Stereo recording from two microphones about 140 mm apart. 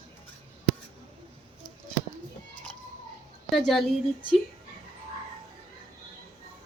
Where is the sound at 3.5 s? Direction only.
Centre (ahead or behind).